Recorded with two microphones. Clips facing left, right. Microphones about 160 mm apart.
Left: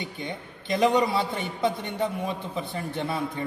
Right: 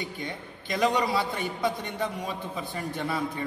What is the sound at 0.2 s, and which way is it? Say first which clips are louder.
A man's voice: left 1 dB; 25° left (ahead or behind).